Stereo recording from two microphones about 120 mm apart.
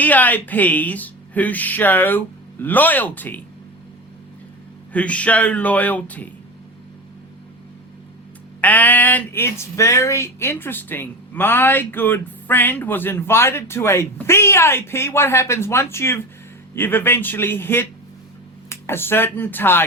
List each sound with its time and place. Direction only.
0.0 s speech: 15° left (ahead or behind)
4.9 s speech: 10° left (ahead or behind)
8.6 s speech: 15° left (ahead or behind)